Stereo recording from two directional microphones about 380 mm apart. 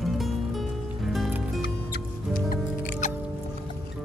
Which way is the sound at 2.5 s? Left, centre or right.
Centre.